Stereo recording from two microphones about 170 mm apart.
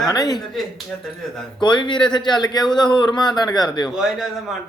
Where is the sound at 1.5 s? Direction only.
25° left (ahead or behind).